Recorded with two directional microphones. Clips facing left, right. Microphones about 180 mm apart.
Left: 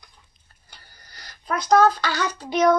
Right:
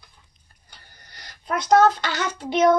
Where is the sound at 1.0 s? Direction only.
20° right (ahead or behind).